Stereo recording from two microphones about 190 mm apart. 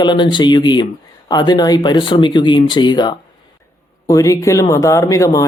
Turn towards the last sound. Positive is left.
turn(degrees=15)  # may be behind; listen again after turning